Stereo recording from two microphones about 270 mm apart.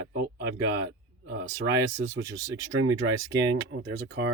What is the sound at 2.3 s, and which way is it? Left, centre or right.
Speech, centre.